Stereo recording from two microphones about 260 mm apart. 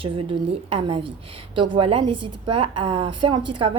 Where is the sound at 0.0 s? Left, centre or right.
Right.